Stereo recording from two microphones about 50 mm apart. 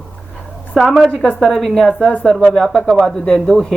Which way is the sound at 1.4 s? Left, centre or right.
Centre.